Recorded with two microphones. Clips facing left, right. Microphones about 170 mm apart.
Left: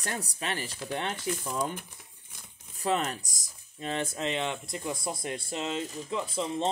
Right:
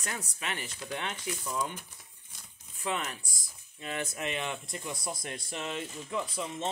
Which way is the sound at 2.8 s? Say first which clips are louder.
Left 6 dB; 35° left (ahead or behind).